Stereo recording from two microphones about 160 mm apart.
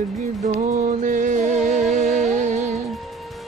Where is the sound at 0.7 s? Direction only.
55° right (ahead or behind).